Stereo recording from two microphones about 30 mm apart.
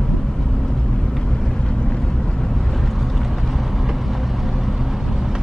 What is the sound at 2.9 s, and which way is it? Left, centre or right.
Vehicle, centre.